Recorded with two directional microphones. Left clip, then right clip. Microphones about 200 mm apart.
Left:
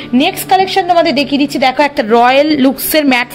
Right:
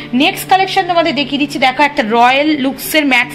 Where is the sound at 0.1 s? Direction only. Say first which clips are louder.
Even; 65° left (ahead or behind).